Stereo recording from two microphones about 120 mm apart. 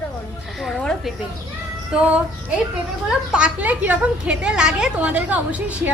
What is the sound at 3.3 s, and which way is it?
A woman's voice, 10° right (ahead or behind).